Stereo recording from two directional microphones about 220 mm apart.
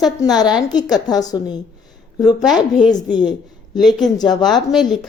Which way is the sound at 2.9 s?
20° left (ahead or behind).